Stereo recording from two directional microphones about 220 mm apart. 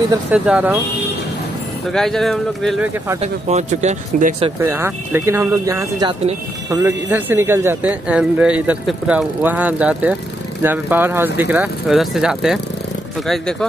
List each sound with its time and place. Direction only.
0.1 s speech: 5° right (ahead or behind)
1.9 s speech: centre (ahead or behind)
3.2 s speech: 30° right (ahead or behind)
4.6 s speech: 10° right (ahead or behind)